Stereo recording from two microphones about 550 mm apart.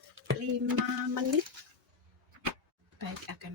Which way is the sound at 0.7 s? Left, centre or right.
Right.